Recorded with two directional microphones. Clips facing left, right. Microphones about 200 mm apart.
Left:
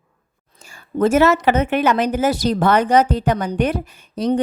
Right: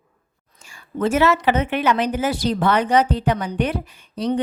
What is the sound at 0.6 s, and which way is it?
A woman's voice, 40° left (ahead or behind).